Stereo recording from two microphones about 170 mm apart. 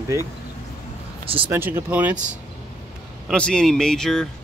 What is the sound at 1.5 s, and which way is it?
Speech, 15° right (ahead or behind).